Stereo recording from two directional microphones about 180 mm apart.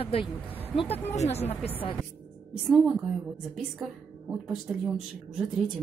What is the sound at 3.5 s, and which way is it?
Speech, 10° right (ahead or behind).